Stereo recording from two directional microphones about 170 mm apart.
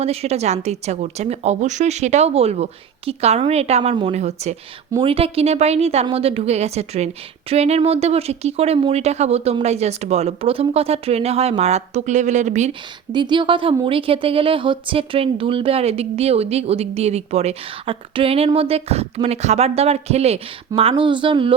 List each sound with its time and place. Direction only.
0.0 s speech: 35° right (ahead or behind)
13.1 s speech: 25° right (ahead or behind)